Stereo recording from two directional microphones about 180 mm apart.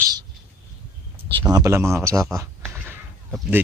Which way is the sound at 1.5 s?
15° right (ahead or behind).